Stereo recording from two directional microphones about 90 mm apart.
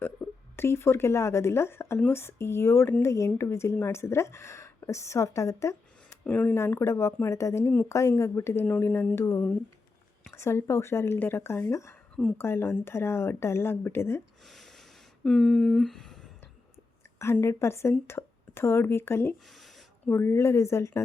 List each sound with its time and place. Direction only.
0.0 s a woman's voice: 25° left (ahead or behind)
6.2 s a woman's voice: 20° left (ahead or behind)
8.6 s speech: 20° left (ahead or behind)
10.3 s speech: 30° left (ahead or behind)
14.4 s a sound: centre (ahead or behind)
17.4 s speech: 30° left (ahead or behind)
19.5 s a sound: centre (ahead or behind)
20.1 s speech: 25° left (ahead or behind)